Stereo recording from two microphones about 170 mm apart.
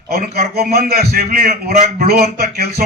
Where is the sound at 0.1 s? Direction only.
60° right (ahead or behind).